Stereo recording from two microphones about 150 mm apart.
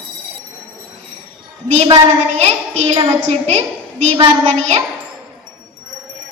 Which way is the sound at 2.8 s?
45° right (ahead or behind).